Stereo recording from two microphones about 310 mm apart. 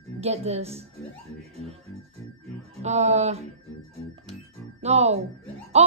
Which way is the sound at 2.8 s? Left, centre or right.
Right.